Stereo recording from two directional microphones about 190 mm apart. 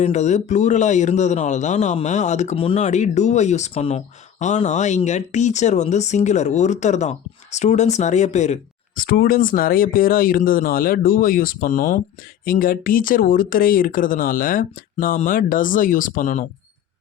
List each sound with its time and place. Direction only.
0.0 s speech: 35° left (ahead or behind)
9.0 s speech: 50° left (ahead or behind)